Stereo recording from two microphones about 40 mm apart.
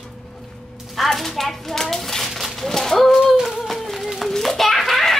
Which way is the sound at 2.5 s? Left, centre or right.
Centre.